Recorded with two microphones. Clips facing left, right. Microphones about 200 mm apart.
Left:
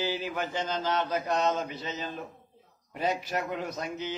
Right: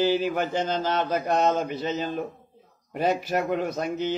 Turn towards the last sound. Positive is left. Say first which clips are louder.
# right 7 dB
turn(degrees=-55)  # may be behind; listen again after turning